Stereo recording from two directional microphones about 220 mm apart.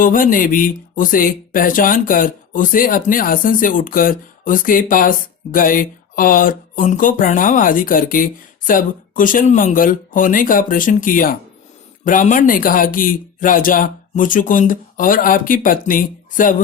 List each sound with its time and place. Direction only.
0.0 s speech: 40° left (ahead or behind)